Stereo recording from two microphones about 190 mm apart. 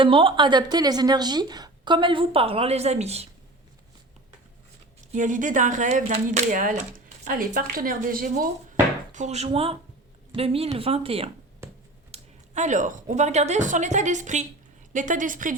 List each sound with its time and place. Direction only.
0.0 s a woman's voice: 25° right (ahead or behind)
5.1 s speech: 40° right (ahead or behind)
9.1 s speech: 35° right (ahead or behind)